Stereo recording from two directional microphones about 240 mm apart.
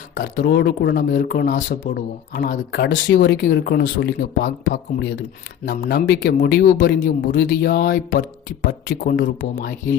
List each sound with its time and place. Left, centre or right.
0.1 s speech: left